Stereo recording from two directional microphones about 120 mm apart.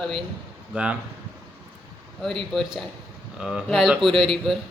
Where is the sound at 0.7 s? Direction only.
10° right (ahead or behind).